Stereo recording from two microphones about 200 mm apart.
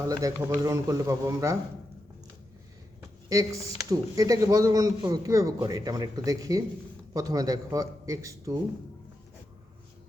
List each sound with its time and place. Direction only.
0.1 s a man's voice: 20° right (ahead or behind)
3.2 s a man's voice: 15° right (ahead or behind)